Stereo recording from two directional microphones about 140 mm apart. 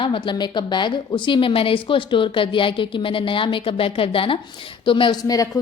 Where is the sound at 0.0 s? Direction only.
35° left (ahead or behind).